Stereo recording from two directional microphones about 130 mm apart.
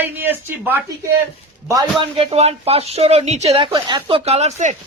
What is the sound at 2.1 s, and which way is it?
Speech, 50° right (ahead or behind).